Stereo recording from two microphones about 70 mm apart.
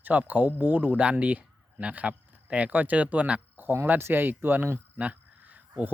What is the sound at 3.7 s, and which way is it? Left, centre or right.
Speech, right.